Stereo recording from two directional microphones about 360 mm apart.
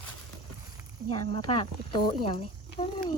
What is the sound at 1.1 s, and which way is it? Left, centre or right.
Speech, centre.